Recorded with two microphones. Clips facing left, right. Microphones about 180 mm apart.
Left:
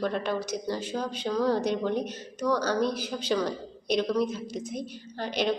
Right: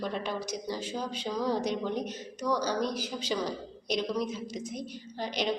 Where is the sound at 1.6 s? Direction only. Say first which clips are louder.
Left 4 dB; 60° left (ahead or behind).